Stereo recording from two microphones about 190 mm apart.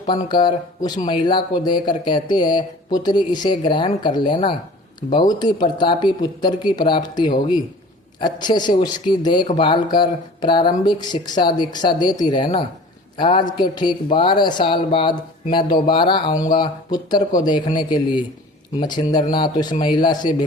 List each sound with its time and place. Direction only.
0.0 s speech: 25° left (ahead or behind)